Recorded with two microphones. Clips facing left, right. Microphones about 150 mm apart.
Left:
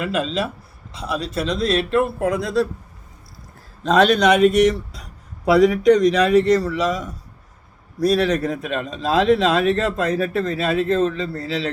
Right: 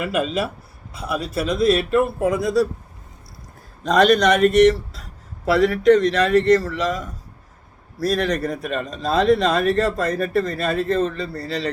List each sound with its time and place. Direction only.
0.0 s speech: 10° right (ahead or behind)
3.8 s a man's voice: 5° left (ahead or behind)